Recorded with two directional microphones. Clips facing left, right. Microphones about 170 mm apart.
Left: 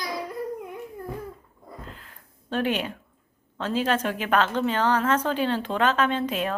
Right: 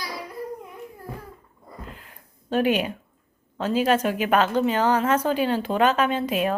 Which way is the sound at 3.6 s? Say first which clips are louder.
Right 4 dB; 10° right (ahead or behind).